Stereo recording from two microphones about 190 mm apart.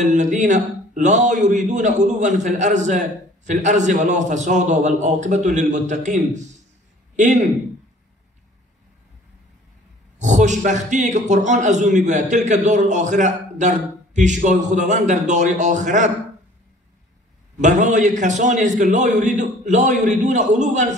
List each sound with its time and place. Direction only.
0.0 s a man's voice: 40° right (ahead or behind)
10.1 s a man's voice: 40° right (ahead or behind)
17.6 s a man's voice: 40° right (ahead or behind)